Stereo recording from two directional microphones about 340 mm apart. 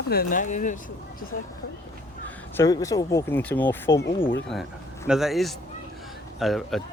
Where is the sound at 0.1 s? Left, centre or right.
Left.